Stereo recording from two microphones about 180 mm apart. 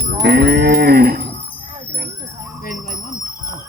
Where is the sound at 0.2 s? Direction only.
65° right (ahead or behind).